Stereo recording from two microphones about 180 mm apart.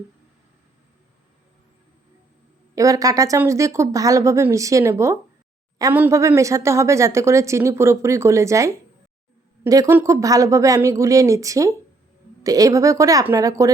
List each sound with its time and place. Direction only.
2.7 s speech: 20° right (ahead or behind)